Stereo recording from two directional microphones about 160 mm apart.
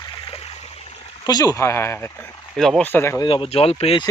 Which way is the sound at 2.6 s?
5° left (ahead or behind).